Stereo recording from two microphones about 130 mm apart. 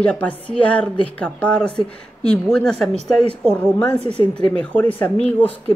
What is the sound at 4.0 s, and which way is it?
Speech, 50° right (ahead or behind).